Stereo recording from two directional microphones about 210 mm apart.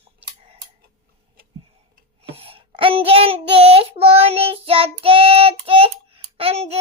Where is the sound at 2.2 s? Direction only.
25° right (ahead or behind).